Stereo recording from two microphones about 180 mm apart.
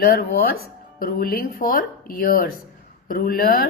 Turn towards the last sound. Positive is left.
turn(degrees=50)  # may be behind; listen again after turning